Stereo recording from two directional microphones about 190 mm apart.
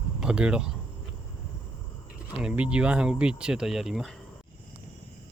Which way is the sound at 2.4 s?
5° right (ahead or behind).